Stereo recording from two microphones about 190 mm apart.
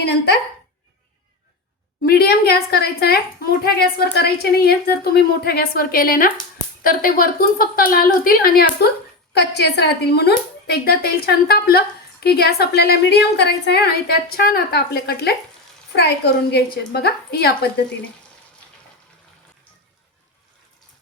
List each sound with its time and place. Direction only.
0.0 s a woman's voice: 60° left (ahead or behind)
2.0 s a woman's voice: 55° left (ahead or behind)